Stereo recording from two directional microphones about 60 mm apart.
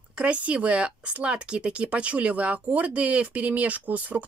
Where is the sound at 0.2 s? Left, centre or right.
Right.